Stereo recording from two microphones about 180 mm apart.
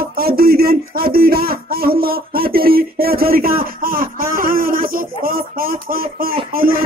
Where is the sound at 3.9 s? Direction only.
50° right (ahead or behind).